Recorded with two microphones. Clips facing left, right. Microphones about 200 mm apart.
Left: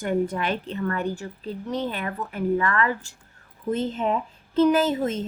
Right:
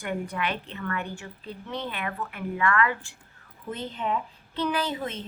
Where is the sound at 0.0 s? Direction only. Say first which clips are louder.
Left 6 dB; 40° left (ahead or behind).